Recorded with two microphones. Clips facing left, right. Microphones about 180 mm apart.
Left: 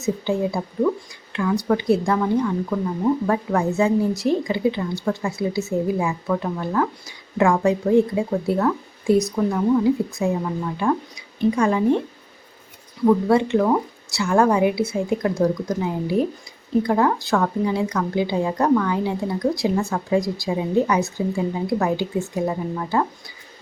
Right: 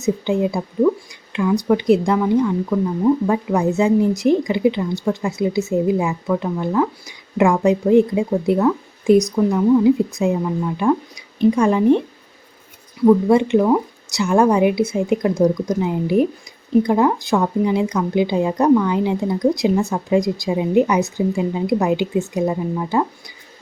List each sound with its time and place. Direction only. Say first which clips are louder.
0.0 s a woman's voice: right 3 dB; 15° right (ahead or behind)
9.5 s speech: right 5 dB; 5° right (ahead or behind)
9.8 s a woman's voice: right 4 dB; 20° right (ahead or behind)
11.3 s a woman's voice: right 4 dB; 20° right (ahead or behind)
13.1 s a woman's voice: right 4 dB; 15° right (ahead or behind)